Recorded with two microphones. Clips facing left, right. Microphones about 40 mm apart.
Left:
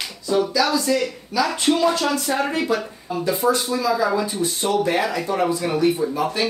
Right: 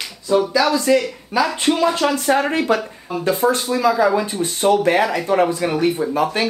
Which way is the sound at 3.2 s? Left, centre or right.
Right.